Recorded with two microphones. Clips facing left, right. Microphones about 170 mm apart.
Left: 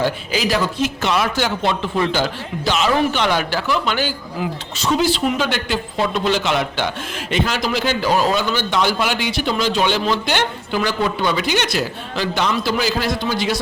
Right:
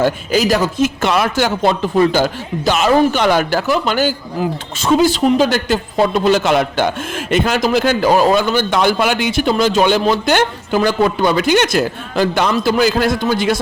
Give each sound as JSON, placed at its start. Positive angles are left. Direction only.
{"t": 0.0, "sound": "speech", "side_deg": -45}